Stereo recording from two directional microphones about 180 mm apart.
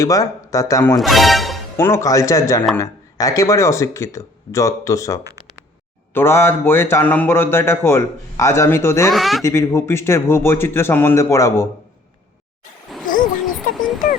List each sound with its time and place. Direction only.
0.0 s speech: 20° left (ahead or behind)
0.9 s speech: centre (ahead or behind)
1.7 s a man's voice: 15° left (ahead or behind)
9.0 s speech: centre (ahead or behind)
9.4 s a man's voice: 15° left (ahead or behind)
13.1 s a sound: 50° left (ahead or behind)
13.7 s a sound: centre (ahead or behind)